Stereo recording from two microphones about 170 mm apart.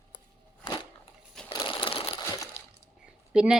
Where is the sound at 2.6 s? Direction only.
35° left (ahead or behind).